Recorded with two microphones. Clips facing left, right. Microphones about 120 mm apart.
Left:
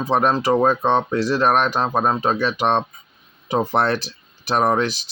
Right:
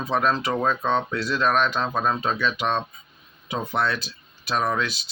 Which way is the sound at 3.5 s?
55° left (ahead or behind).